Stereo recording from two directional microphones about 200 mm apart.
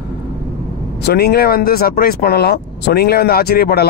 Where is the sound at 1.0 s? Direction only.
50° left (ahead or behind).